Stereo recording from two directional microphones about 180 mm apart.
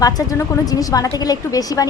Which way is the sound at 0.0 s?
20° left (ahead or behind).